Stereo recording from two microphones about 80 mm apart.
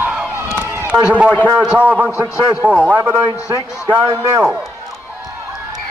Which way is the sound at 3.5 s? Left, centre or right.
Right.